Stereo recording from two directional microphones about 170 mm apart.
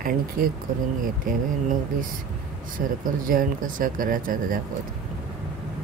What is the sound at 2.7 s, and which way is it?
Speech, 55° right (ahead or behind).